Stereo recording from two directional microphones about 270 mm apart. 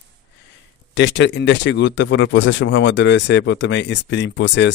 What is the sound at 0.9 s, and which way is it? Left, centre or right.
Speech, left.